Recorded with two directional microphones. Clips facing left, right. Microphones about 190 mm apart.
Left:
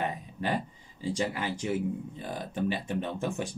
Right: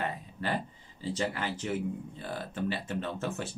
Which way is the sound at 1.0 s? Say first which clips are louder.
Left 2 dB; 10° left (ahead or behind).